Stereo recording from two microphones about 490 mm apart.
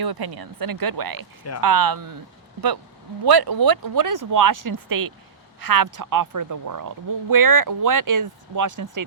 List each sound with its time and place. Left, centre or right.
0.0 s a woman's voice: right
3.2 s a woman's voice: right